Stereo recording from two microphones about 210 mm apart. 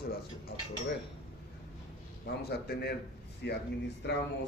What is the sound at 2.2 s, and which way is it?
A man's voice, 50° left (ahead or behind).